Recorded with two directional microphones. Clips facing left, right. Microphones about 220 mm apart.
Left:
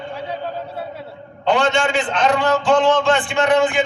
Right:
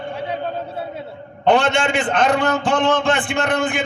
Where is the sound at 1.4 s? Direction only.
60° right (ahead or behind).